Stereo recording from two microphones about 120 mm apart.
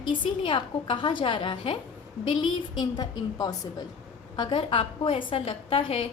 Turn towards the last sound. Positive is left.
turn(degrees=50)  # may be behind; listen again after turning